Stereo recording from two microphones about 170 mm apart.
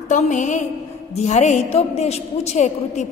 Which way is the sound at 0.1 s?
45° left (ahead or behind).